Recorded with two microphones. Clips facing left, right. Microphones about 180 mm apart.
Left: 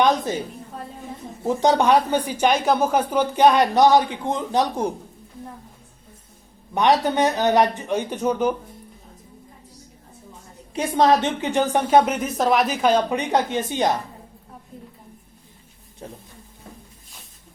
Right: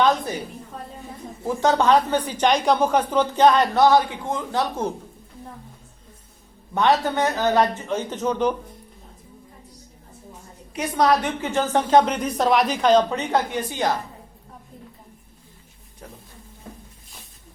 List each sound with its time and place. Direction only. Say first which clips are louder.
0.0 s a woman's voice: left 1 dB; 15° left (ahead or behind)
1.5 s a woman's voice: left 1 dB; 15° left (ahead or behind)
6.7 s a woman's voice: left 1 dB; 15° left (ahead or behind)
10.8 s a woman's voice: left 2 dB; 25° left (ahead or behind)
16.0 s speech: left 5 dB; 25° left (ahead or behind)